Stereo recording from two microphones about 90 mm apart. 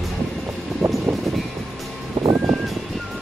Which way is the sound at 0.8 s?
Centre (ahead or behind).